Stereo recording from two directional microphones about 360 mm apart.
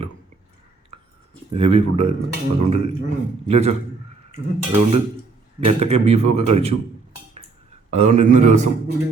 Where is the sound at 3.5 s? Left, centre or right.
Centre.